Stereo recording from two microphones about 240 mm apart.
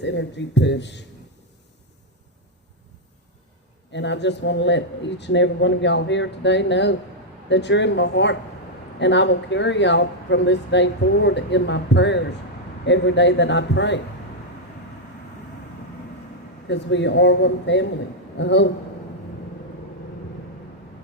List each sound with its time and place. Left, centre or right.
0.0 s speech: left
3.9 s speech: left
16.6 s speech: left